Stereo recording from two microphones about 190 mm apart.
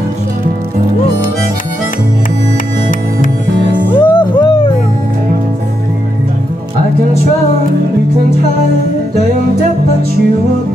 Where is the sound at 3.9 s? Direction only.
25° left (ahead or behind).